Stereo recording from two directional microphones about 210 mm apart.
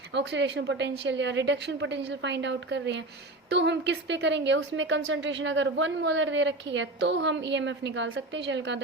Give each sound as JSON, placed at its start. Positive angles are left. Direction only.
{"t": 0.1, "sound": "a woman's voice", "side_deg": -55}